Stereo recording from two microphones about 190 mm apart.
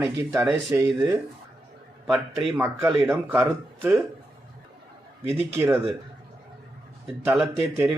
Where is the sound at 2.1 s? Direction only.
10° right (ahead or behind).